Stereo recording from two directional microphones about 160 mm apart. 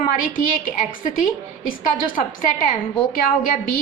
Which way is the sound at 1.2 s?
60° left (ahead or behind).